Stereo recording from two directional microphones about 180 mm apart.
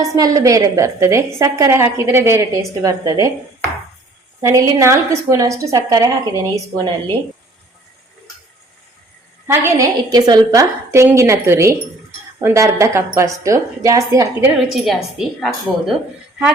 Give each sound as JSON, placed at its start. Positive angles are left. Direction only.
{"t": 0.0, "sound": "a woman's voice", "side_deg": -20}
{"t": 4.4, "sound": "a woman's voice", "side_deg": -15}
{"t": 9.5, "sound": "a woman's voice", "side_deg": -15}
{"t": 14.7, "sound": "a woman's voice", "side_deg": 0}